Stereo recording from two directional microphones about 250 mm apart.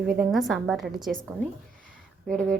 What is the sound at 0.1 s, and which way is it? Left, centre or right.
A woman's voice, centre.